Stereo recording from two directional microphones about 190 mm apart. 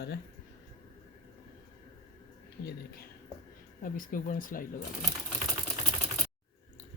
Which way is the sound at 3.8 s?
45° left (ahead or behind).